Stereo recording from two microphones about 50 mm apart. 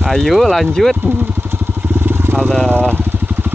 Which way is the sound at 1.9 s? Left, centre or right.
Right.